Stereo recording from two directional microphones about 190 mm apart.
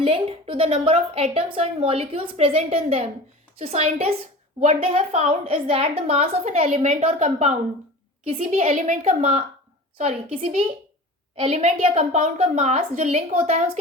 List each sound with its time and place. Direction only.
0.0 s a woman's voice: 30° right (ahead or behind)
10.3 s a woman's voice: 30° right (ahead or behind)